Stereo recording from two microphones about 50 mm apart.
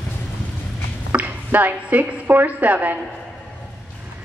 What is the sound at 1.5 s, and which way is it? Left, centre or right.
A woman's voice, right.